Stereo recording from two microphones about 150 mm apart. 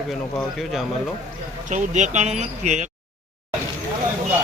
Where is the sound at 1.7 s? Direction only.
55° right (ahead or behind).